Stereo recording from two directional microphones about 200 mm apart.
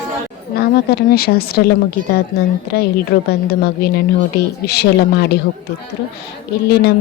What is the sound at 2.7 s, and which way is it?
A woman's voice, 50° left (ahead or behind).